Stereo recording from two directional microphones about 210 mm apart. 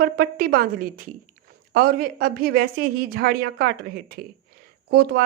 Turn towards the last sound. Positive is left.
turn(degrees=-50)  # may be behind; listen again after turning